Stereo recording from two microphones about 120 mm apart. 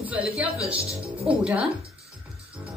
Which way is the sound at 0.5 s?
55° right (ahead or behind).